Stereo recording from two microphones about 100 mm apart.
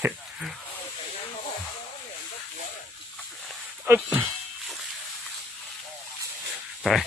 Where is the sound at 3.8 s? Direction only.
20° right (ahead or behind).